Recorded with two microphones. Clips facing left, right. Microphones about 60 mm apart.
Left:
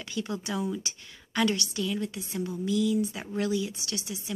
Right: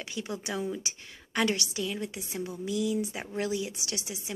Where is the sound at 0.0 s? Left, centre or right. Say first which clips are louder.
Left 2 dB; right.